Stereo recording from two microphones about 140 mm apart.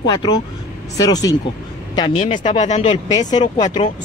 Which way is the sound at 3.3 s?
35° left (ahead or behind).